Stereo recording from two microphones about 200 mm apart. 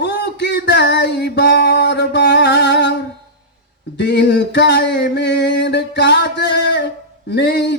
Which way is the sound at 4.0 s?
60° left (ahead or behind).